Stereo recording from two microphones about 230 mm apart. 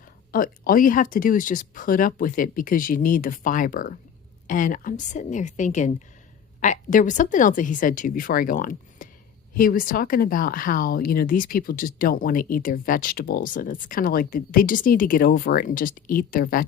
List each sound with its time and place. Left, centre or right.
0.3 s a woman's voice: left